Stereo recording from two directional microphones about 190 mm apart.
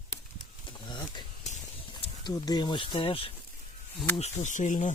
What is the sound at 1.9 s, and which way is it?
Speech, 20° left (ahead or behind).